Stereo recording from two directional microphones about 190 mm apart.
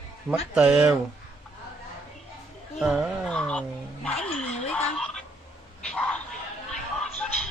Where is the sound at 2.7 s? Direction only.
Centre (ahead or behind).